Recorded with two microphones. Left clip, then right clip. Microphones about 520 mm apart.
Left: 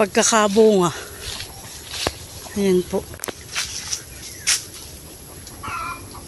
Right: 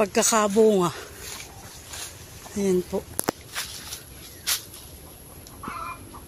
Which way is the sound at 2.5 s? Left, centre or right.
Right.